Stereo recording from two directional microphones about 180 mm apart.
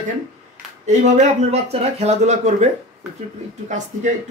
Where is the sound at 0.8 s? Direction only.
40° right (ahead or behind).